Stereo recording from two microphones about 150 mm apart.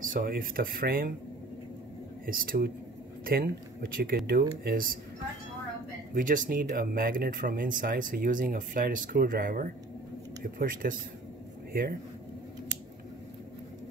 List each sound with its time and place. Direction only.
0.0 s speech: 65° right (ahead or behind)
2.2 s speech: 70° right (ahead or behind)
6.1 s speech: 65° right (ahead or behind)